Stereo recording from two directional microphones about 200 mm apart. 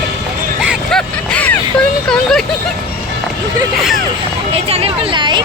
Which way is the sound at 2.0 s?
5° left (ahead or behind).